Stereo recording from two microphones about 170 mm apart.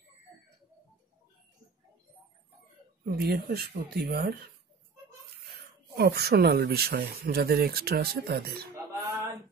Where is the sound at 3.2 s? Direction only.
65° right (ahead or behind).